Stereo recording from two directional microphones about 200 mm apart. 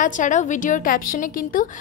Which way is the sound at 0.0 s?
40° left (ahead or behind).